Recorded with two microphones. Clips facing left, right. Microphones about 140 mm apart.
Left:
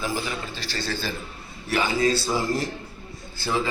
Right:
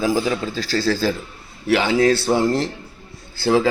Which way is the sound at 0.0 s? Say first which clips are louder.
Right 9 dB; 90° right.